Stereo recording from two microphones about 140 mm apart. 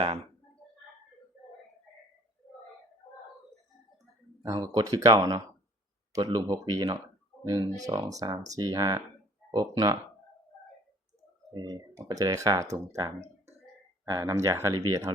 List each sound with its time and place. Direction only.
4.6 s speech: 25° right (ahead or behind)
11.5 s speech: 30° right (ahead or behind)